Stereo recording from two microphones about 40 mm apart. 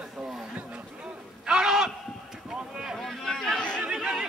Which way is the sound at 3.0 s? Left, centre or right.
Centre.